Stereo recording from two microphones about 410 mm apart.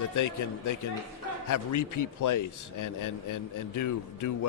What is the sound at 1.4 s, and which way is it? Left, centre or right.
A man's voice, left.